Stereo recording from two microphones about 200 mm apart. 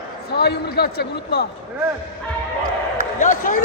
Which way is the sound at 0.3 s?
55° left (ahead or behind).